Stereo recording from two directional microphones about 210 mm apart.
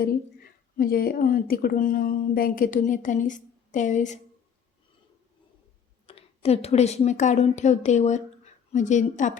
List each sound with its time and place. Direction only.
0.8 s speech: 45° left (ahead or behind)
6.1 s speech: 30° left (ahead or behind)